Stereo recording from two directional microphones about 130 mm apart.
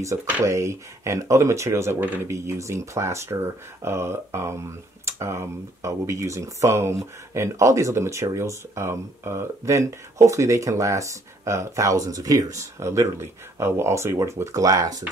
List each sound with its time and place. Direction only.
0.0 s speech: 25° right (ahead or behind)